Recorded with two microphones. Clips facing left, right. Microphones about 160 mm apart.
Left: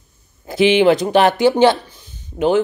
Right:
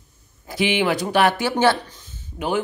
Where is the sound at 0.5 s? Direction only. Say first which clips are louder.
Left 8 dB; 25° left (ahead or behind).